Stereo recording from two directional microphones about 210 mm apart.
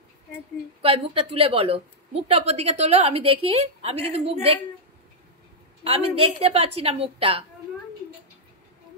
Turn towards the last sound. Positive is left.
turn(degrees=-25)  # may be behind; listen again after turning